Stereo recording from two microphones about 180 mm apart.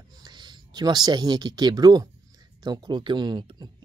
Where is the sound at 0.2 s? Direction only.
25° right (ahead or behind).